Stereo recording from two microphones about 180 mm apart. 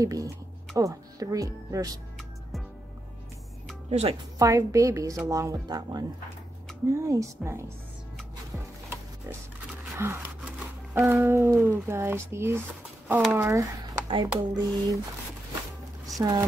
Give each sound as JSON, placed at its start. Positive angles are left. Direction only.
{"t": 0.0, "sound": "speech", "side_deg": -20}
{"t": 3.9, "sound": "speech", "side_deg": -35}
{"t": 4.4, "sound": "speech", "side_deg": -20}
{"t": 9.9, "sound": "speech", "side_deg": -15}
{"t": 14.0, "sound": "speech", "side_deg": -30}
{"t": 16.2, "sound": "speech", "side_deg": -20}